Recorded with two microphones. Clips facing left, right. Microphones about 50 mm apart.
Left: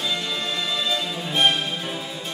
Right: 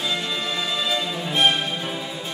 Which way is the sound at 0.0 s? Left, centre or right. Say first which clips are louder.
Right 1 dB; centre.